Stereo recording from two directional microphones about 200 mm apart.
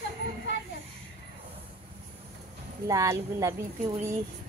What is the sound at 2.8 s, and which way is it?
Speech, 15° right (ahead or behind).